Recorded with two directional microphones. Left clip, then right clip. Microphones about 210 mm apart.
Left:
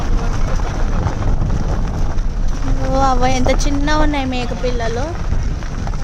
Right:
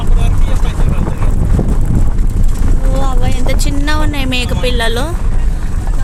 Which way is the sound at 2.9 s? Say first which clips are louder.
Left 7 dB; 30° left (ahead or behind).